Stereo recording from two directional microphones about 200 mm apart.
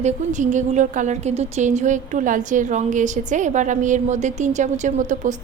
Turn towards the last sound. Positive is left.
turn(degrees=-40)  # may be behind; listen again after turning